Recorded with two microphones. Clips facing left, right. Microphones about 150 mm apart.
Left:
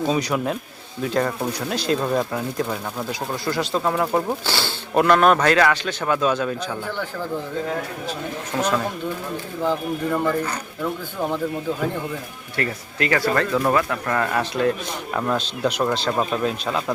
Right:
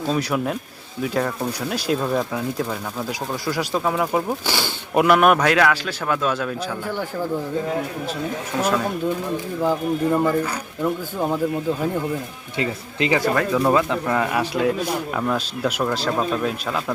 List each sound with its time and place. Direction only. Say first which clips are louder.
0.1 s speech: even; centre (ahead or behind)
4.4 s a man's voice: right 1 dB; 15° right (ahead or behind)
8.5 s speech: right 1 dB; centre (ahead or behind)
9.6 s a man's voice: right 2 dB; 10° right (ahead or behind)
12.5 s a man's voice: right 1 dB; 15° right (ahead or behind); by 16.8 s centre (ahead or behind)